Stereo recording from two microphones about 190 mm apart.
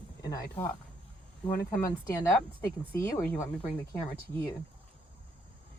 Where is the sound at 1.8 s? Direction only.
15° left (ahead or behind).